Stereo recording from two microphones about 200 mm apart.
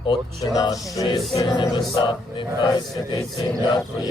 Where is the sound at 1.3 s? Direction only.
20° left (ahead or behind).